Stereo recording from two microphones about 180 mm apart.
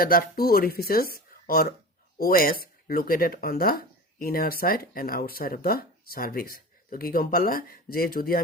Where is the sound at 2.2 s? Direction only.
55° left (ahead or behind).